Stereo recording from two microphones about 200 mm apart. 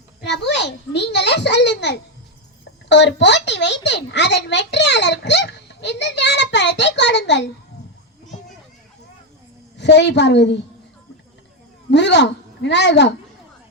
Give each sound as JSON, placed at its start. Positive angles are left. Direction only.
{"t": 0.3, "sound": "a sound", "side_deg": 55}
{"t": 2.9, "sound": "a child's voice", "side_deg": 60}
{"t": 9.7, "sound": "a child's voice", "side_deg": 60}
{"t": 11.9, "sound": "a child's voice", "side_deg": 60}